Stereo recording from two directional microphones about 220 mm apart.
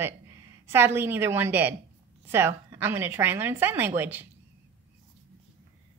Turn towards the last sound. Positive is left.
turn(degrees=-10)  # may be behind; listen again after turning